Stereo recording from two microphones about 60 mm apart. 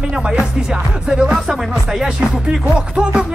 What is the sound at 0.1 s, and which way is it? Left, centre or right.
Music, centre.